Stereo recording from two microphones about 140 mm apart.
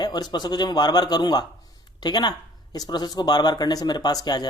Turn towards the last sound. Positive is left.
turn(degrees=30)  # may be behind; listen again after turning